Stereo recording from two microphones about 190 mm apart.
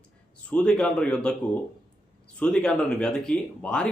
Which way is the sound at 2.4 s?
5° left (ahead or behind).